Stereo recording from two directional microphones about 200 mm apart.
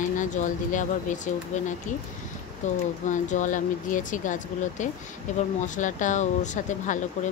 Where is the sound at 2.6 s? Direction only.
35° left (ahead or behind).